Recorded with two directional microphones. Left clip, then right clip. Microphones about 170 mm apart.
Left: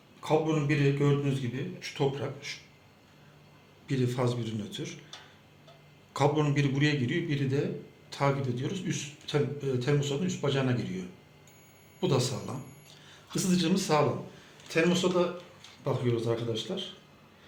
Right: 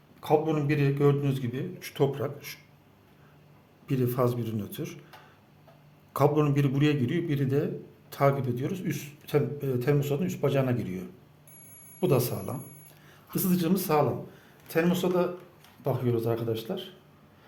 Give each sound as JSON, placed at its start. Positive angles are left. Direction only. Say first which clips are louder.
{"t": 0.2, "sound": "speech", "louder": "right 2 dB", "side_deg": -60}
{"t": 3.8, "sound": "a man's voice", "louder": "right 3 dB", "side_deg": -90}
{"t": 6.1, "sound": "a man's voice", "louder": "right 3 dB", "side_deg": -90}
{"t": 15.8, "sound": "speech", "louder": "right 2 dB", "side_deg": -70}